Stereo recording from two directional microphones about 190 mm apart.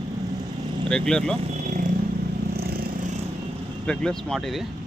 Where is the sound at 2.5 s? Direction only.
55° right (ahead or behind).